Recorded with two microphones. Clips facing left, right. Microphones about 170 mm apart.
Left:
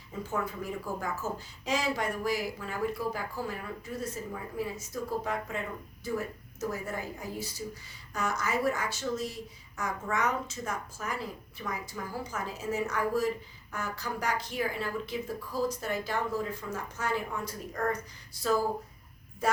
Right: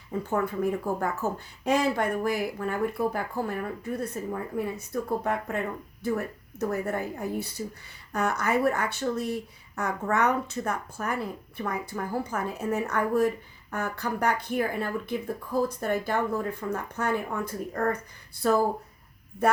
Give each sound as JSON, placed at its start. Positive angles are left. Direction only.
{"t": 0.1, "sound": "speech", "side_deg": -60}